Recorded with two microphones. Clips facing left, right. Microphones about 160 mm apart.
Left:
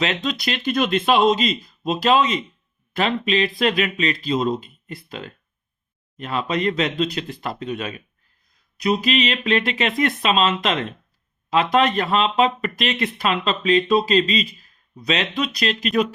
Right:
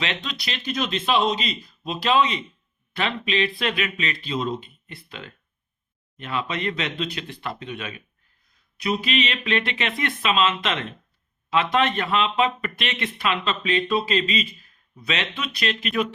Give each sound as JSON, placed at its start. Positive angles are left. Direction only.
{"t": 0.0, "sound": "speech", "side_deg": 40}